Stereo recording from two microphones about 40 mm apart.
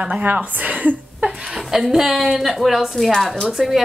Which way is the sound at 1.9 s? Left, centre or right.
Centre.